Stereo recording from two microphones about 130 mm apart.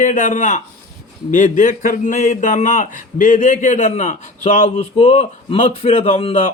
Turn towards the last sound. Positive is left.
turn(degrees=55)  # may be behind; listen again after turning